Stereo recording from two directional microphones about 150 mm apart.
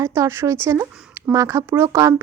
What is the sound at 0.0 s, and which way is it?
Speech, 20° right (ahead or behind).